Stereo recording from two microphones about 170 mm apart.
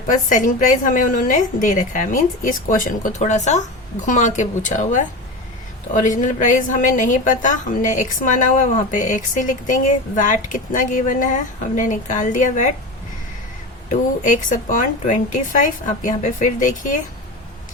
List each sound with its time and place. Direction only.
0.1 s a woman's voice: 50° left (ahead or behind)
13.9 s a woman's voice: 50° left (ahead or behind)